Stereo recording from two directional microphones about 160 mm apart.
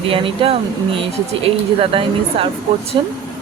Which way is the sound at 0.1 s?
35° right (ahead or behind).